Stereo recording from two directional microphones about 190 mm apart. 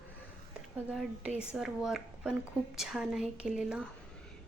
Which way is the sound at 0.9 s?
5° right (ahead or behind).